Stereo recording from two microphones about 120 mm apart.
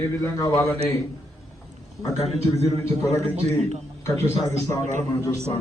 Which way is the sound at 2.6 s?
25° left (ahead or behind).